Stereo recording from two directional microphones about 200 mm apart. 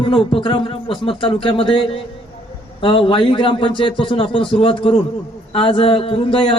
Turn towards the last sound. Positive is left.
turn(degrees=25)  # may be behind; listen again after turning